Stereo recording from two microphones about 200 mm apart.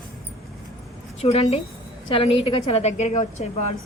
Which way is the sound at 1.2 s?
30° left (ahead or behind).